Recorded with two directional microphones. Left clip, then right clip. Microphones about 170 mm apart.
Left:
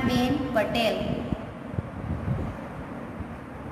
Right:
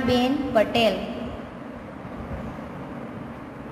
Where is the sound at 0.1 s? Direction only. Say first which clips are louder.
Right 7 dB; 40° right (ahead or behind).